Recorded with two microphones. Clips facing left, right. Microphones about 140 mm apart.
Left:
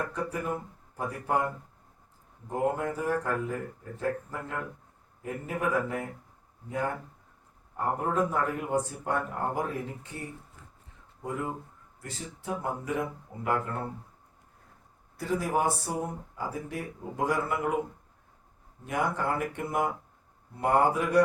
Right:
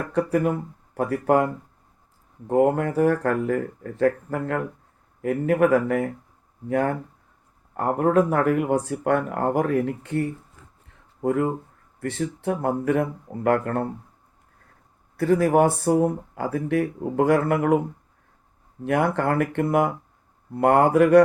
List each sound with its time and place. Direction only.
0.1 s speech: 70° right (ahead or behind)
2.5 s speech: 70° right (ahead or behind)
15.2 s speech: 65° right (ahead or behind)
18.9 s speech: 65° right (ahead or behind)